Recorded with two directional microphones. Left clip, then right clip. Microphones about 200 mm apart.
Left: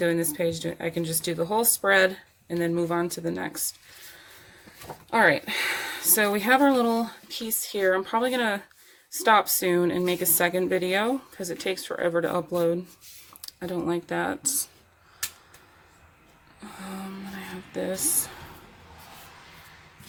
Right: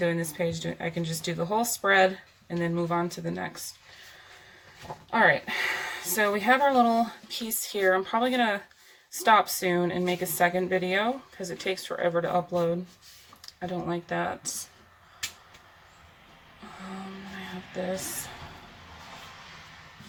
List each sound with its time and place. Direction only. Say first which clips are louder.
0.0 s speech: left 3 dB; 35° left (ahead or behind)
5.1 s speech: left 1 dB; 35° left (ahead or behind)